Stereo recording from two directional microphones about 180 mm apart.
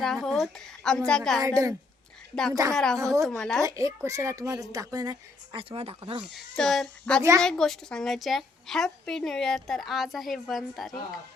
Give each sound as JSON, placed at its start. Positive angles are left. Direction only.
{"t": 0.0, "sound": "a woman's voice", "side_deg": 0}
{"t": 1.4, "sound": "a woman's voice", "side_deg": -20}
{"t": 2.3, "sound": "a woman's voice", "side_deg": 5}
{"t": 3.0, "sound": "a woman's voice", "side_deg": -15}
{"t": 3.2, "sound": "a woman's voice", "side_deg": 0}
{"t": 3.6, "sound": "speech", "side_deg": -20}
{"t": 6.3, "sound": "a woman's voice", "side_deg": 0}
{"t": 7.2, "sound": "a woman's voice", "side_deg": -15}
{"t": 7.4, "sound": "a woman's voice", "side_deg": 5}